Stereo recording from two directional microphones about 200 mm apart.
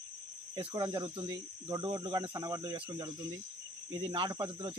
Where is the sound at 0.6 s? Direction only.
20° right (ahead or behind).